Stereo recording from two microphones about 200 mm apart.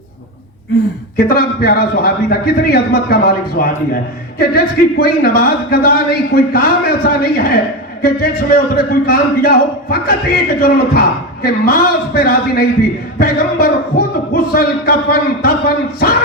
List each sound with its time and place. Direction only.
1.1 s speech: 50° left (ahead or behind)